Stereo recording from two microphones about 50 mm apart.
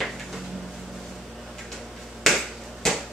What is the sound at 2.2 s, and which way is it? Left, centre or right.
Finger snapping, centre.